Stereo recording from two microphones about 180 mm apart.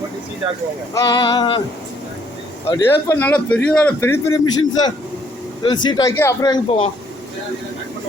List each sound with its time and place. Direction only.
0.9 s a man's voice: 20° left (ahead or behind)
2.6 s a man's voice: 20° left (ahead or behind)
3.2 s a man's voice: 10° left (ahead or behind)
5.6 s a man's voice: 25° left (ahead or behind)